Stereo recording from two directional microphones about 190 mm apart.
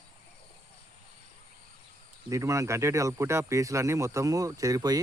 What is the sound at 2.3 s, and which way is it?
Speech, 15° right (ahead or behind).